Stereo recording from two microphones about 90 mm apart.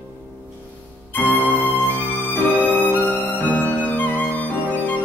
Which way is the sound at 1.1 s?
20° left (ahead or behind).